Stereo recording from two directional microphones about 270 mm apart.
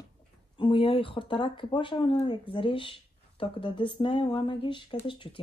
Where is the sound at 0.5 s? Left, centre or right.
Centre.